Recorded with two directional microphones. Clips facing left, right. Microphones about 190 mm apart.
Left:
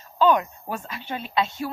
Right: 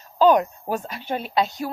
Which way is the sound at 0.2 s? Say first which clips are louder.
Right 3 dB; 40° right (ahead or behind).